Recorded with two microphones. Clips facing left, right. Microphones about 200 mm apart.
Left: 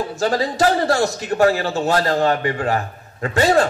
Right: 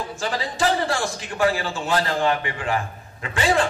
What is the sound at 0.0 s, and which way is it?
A man's voice, 40° left (ahead or behind).